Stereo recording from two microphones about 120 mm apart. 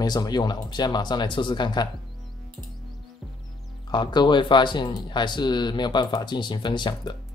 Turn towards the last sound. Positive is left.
turn(degrees=40)  # may be behind; listen again after turning